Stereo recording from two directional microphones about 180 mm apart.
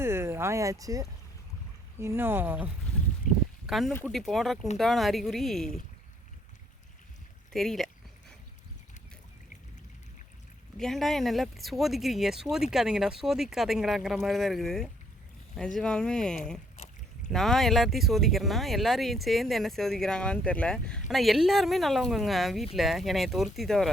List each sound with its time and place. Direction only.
0.0 s speech: 15° right (ahead or behind)
3.3 s a sound: 45° left (ahead or behind)
3.7 s speech: centre (ahead or behind)
7.5 s speech: centre (ahead or behind)
10.8 s speech: centre (ahead or behind)